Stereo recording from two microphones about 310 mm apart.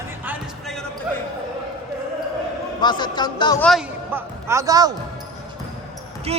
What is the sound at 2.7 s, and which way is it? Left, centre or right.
Speech, centre.